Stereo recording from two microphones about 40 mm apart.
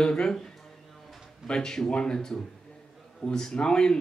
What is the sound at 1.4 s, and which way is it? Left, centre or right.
Speech, centre.